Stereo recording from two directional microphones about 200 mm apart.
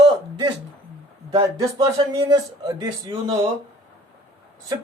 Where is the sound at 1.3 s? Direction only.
20° right (ahead or behind).